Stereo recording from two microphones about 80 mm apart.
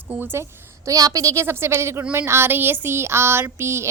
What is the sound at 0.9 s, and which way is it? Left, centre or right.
A woman's voice, right.